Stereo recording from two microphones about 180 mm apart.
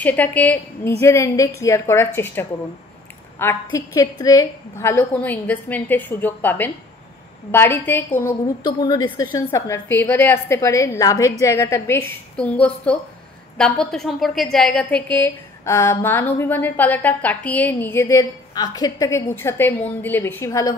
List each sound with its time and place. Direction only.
0.0 s a woman's voice: 10° left (ahead or behind)
8.6 s a woman's voice: 25° left (ahead or behind)